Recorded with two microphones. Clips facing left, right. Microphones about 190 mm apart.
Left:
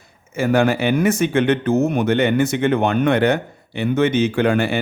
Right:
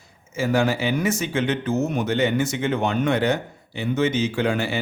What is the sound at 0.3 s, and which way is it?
Speech, 60° left (ahead or behind).